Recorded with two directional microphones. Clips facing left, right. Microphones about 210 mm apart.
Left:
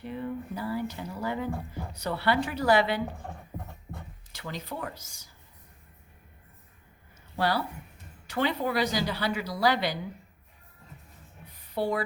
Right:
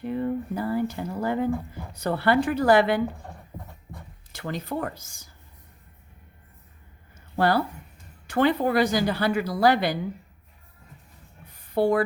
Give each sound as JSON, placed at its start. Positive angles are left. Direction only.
{"t": 0.0, "sound": "a woman's voice", "side_deg": -50}
{"t": 4.3, "sound": "a woman's voice", "side_deg": -50}
{"t": 7.3, "sound": "a woman's voice", "side_deg": -50}
{"t": 11.7, "sound": "rub", "side_deg": -50}